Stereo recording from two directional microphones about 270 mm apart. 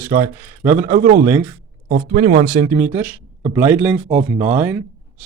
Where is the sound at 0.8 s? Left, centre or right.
Right.